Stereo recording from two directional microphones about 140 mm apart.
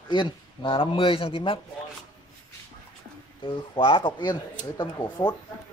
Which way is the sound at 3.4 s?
40° left (ahead or behind).